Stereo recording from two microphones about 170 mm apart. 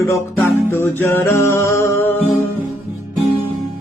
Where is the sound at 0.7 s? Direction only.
15° left (ahead or behind).